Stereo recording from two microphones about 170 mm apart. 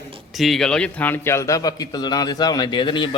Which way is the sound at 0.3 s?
Centre (ahead or behind).